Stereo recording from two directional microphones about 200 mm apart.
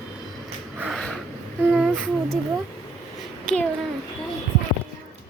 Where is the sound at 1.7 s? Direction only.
5° right (ahead or behind).